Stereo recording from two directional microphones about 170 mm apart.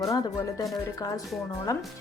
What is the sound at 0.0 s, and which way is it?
Speech, 20° left (ahead or behind).